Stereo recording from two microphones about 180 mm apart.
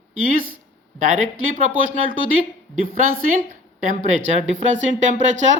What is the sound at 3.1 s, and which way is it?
Speech, 50° right (ahead or behind).